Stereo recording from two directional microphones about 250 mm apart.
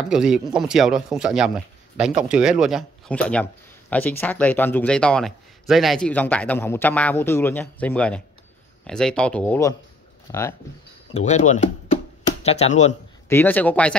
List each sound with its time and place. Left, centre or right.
0.0 s speech: centre
11.1 s speech: left
13.3 s speech: centre